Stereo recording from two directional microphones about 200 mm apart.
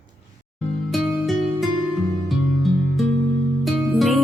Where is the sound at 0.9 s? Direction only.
Centre (ahead or behind).